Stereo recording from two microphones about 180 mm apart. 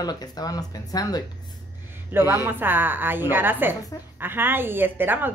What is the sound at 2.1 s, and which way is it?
A woman's voice, 10° right (ahead or behind).